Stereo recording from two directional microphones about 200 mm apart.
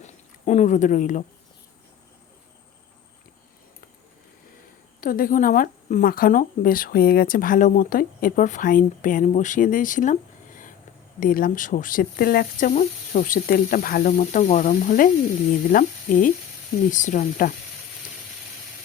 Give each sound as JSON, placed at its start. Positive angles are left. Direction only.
{"t": 0.0, "sound": "speech", "side_deg": 35}
{"t": 4.9, "sound": "a woman's voice", "side_deg": 45}